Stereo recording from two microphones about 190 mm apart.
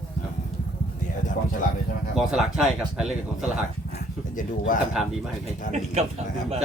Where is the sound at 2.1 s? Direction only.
Centre (ahead or behind).